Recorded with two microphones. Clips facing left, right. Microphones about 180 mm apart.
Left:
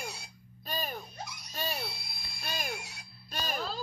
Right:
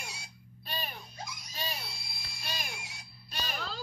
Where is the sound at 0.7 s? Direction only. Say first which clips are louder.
Left 4 dB; 45° left (ahead or behind).